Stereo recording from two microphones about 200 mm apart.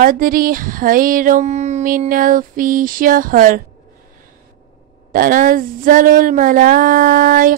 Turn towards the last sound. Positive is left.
turn(degrees=-45)  # may be behind; listen again after turning